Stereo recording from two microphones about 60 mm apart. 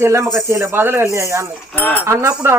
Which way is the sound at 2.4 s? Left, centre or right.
Right.